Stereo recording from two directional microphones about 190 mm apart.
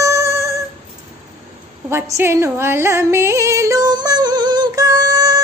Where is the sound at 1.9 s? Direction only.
15° right (ahead or behind).